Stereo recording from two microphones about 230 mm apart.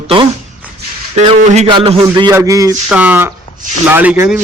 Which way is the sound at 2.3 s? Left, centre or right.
Centre.